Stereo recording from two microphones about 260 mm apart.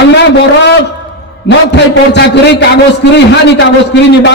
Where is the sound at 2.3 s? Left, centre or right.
Left.